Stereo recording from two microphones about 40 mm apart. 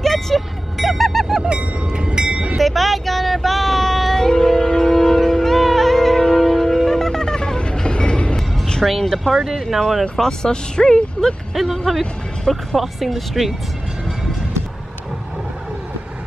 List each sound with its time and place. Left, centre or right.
0.0 s vehicle: centre
1.4 s train: right
2.6 s child singing: centre; by 8.4 s left
8.8 s speech: centre
10.2 s speech: centre
11.5 s speech: centre